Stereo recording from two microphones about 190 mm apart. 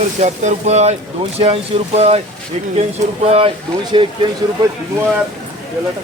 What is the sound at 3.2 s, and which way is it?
Speech, 35° right (ahead or behind).